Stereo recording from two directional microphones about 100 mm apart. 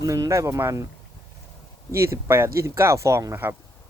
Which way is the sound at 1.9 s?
25° right (ahead or behind).